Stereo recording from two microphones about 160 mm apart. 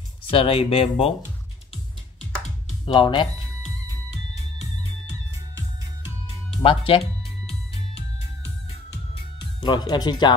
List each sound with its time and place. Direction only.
0.3 s speech: 35° left (ahead or behind)
2.9 s speech: 30° left (ahead or behind)
6.6 s speech: 35° left (ahead or behind)
9.6 s speech: 30° left (ahead or behind)